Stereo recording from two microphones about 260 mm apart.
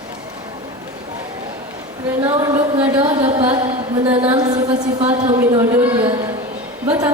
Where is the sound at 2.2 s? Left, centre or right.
Centre.